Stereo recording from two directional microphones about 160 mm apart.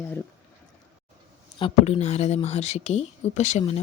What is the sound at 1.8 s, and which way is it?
Speech, 40° left (ahead or behind).